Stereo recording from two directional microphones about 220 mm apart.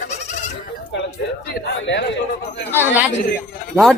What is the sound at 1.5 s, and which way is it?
Speech, 55° left (ahead or behind).